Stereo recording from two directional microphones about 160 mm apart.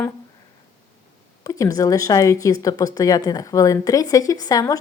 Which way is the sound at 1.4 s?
20° left (ahead or behind).